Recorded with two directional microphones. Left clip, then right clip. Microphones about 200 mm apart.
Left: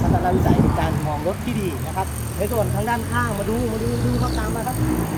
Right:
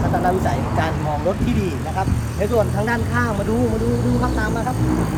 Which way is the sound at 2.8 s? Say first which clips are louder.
Right 1 dB; 20° left (ahead or behind).